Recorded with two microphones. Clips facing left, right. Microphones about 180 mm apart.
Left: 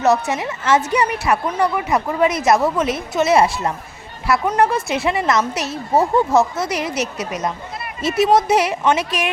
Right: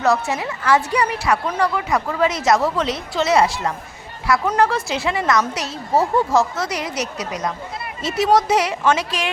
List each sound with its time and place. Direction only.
0.0 s a woman's voice: 20° left (ahead or behind)